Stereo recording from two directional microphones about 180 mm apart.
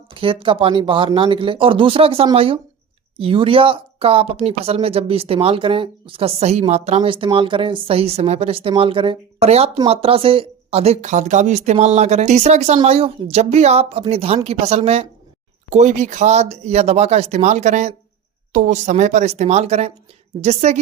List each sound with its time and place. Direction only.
0.1 s speech: 30° right (ahead or behind)